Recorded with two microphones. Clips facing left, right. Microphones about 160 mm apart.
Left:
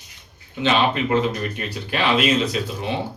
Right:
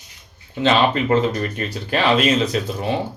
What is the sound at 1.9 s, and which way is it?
Speech, 45° right (ahead or behind).